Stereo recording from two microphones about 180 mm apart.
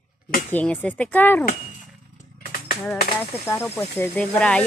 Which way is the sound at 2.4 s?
55° left (ahead or behind).